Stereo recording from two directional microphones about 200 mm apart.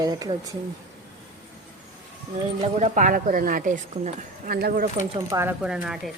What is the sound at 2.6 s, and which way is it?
A woman's voice, 40° right (ahead or behind).